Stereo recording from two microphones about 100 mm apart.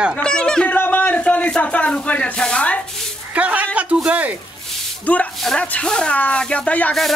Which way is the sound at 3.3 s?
15° right (ahead or behind).